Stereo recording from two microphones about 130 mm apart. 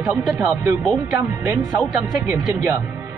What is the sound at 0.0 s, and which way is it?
Speech, 10° right (ahead or behind).